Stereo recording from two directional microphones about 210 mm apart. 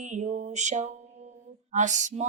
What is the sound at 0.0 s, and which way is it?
Speech, 35° right (ahead or behind).